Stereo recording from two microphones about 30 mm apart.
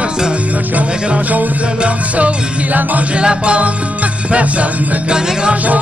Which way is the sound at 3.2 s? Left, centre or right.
Right.